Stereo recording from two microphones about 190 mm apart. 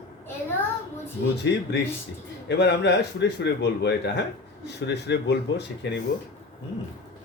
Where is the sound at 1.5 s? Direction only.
65° left (ahead or behind).